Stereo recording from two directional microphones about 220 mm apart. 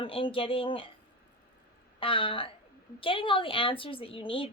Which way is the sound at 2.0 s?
25° left (ahead or behind).